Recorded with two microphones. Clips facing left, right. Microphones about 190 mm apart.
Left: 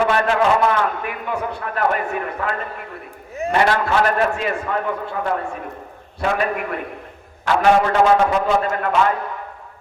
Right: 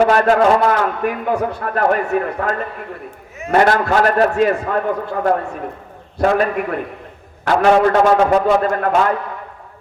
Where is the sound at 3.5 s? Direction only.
45° right (ahead or behind).